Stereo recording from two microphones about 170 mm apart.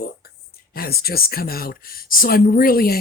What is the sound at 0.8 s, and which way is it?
Speech, 65° left (ahead or behind).